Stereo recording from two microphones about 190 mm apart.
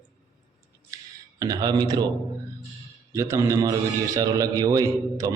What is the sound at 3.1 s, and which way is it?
A man's voice, 15° right (ahead or behind).